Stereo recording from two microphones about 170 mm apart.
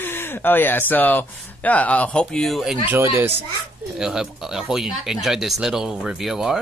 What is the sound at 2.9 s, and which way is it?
A child's voice, 15° right (ahead or behind).